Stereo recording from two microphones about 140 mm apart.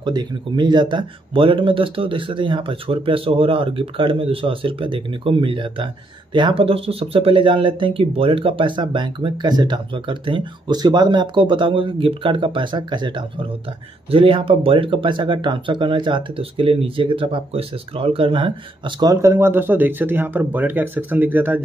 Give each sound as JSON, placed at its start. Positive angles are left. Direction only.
{"t": 0.0, "sound": "speech", "side_deg": -30}
{"t": 19.3, "sound": "speech", "side_deg": -15}